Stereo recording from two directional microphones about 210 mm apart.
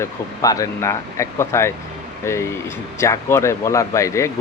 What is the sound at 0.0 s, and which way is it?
Speech, 15° left (ahead or behind).